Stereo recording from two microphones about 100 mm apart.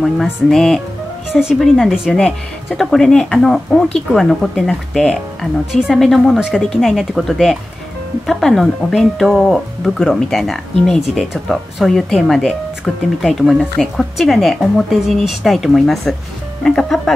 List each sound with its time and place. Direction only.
0.0 s speech: 5° left (ahead or behind)